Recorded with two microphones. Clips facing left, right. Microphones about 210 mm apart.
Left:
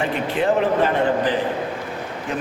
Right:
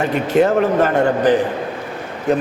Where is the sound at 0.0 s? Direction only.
45° right (ahead or behind).